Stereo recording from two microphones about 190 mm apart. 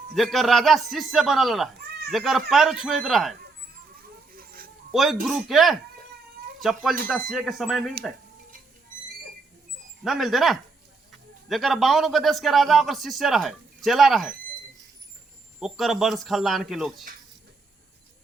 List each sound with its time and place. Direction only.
0.1 s a man's voice: centre (ahead or behind)
4.3 s a sound: 50° right (ahead or behind)
4.9 s a man's voice: centre (ahead or behind)
10.0 s a man's voice: centre (ahead or behind)
15.6 s a man's voice: centre (ahead or behind)